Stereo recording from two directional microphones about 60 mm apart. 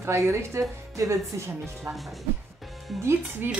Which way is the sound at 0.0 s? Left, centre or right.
Right.